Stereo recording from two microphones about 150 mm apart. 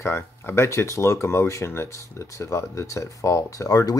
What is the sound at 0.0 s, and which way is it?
Speech, 15° left (ahead or behind).